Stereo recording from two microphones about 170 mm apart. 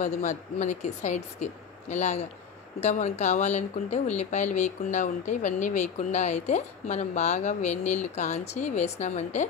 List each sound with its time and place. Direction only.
0.0 s speech: 45° left (ahead or behind)